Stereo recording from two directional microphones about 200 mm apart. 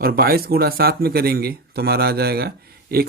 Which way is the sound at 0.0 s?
50° right (ahead or behind).